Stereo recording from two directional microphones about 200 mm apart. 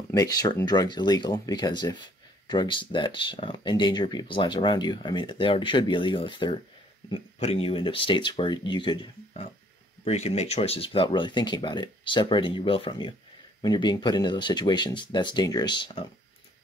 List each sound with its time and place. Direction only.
0.1 s speech: 20° left (ahead or behind)